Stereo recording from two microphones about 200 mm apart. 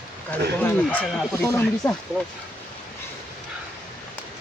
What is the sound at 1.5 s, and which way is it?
Speech, 10° left (ahead or behind).